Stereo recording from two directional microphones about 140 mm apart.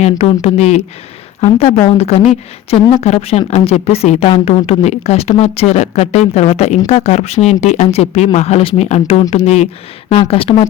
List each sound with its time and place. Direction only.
0.0 s a woman's voice: 50° left (ahead or behind)